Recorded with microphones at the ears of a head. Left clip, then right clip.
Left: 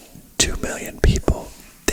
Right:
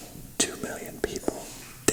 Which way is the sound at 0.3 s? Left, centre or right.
Left.